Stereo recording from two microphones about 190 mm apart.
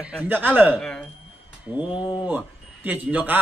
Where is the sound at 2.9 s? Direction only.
10° right (ahead or behind).